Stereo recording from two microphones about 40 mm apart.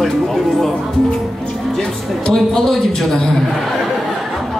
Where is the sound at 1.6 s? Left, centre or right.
Centre.